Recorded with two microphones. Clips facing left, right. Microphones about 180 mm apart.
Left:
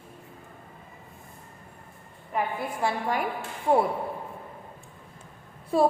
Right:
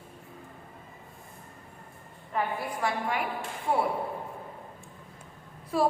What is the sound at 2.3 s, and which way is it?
Speech, 15° left (ahead or behind).